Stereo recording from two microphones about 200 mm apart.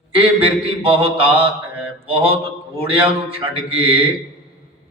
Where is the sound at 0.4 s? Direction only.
30° right (ahead or behind).